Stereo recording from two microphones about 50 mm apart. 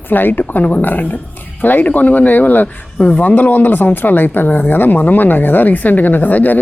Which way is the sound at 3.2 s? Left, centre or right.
Left.